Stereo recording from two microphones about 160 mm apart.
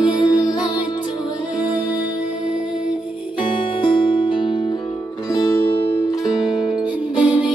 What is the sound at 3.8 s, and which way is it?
Music, 30° left (ahead or behind).